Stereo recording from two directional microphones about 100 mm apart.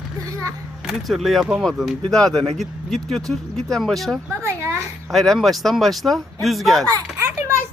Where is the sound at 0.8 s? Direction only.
5° right (ahead or behind).